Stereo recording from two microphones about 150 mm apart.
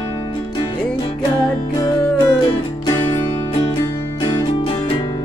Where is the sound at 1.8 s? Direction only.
30° left (ahead or behind).